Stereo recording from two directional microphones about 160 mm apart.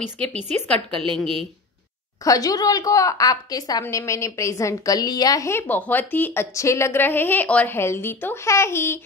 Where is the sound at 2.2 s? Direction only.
20° left (ahead or behind).